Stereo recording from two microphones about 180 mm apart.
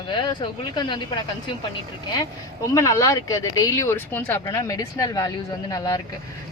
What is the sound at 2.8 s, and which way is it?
Speech, 15° left (ahead or behind).